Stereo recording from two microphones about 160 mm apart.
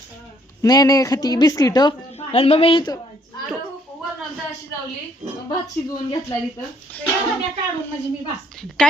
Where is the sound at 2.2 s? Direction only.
40° left (ahead or behind).